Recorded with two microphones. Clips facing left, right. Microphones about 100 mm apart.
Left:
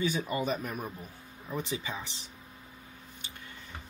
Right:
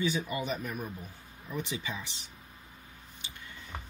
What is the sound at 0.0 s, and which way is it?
Speech, 40° left (ahead or behind).